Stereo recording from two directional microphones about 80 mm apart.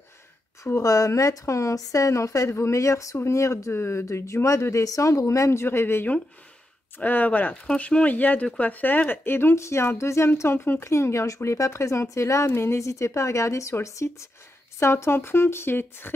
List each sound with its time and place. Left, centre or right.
0.8 s a woman's voice: left